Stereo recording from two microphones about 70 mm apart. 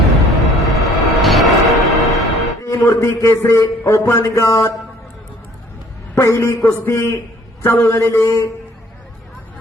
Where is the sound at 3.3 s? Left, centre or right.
Left.